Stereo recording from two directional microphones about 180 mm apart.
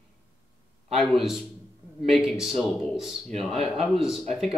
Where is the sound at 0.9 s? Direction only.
Centre (ahead or behind).